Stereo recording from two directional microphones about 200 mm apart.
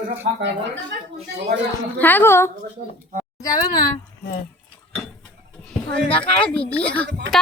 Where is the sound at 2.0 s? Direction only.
10° left (ahead or behind).